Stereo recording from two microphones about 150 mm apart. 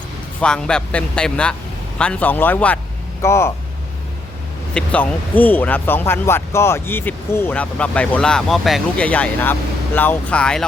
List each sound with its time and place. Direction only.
0.3 s speech: 5° left (ahead or behind)
4.7 s speech: 10° left (ahead or behind)